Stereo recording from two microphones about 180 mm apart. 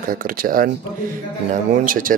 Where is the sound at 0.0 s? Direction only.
50° right (ahead or behind).